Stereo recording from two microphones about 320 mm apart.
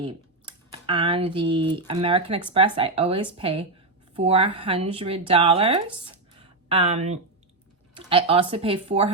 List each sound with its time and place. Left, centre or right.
0.0 s speech: centre